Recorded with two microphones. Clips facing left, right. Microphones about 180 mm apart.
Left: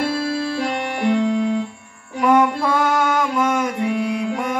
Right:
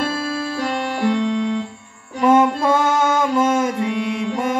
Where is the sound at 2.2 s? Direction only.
25° right (ahead or behind).